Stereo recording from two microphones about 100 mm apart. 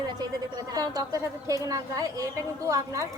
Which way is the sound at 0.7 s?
40° right (ahead or behind).